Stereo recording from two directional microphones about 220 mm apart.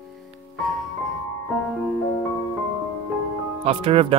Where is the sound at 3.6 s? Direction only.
25° right (ahead or behind).